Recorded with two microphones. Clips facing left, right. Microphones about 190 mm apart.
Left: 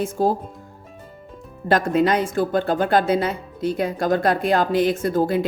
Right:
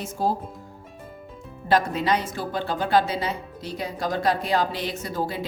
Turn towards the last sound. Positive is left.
turn(degrees=50)  # may be behind; listen again after turning